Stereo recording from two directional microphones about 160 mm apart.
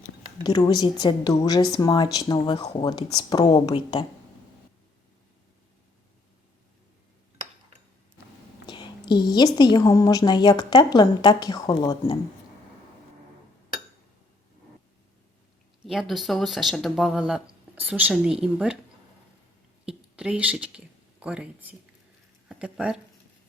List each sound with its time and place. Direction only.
0.4 s speech: 25° left (ahead or behind)
8.6 s speech: 30° left (ahead or behind)
15.8 s speech: centre (ahead or behind)
19.8 s a sound: 5° right (ahead or behind)
22.4 s speech: 5° right (ahead or behind)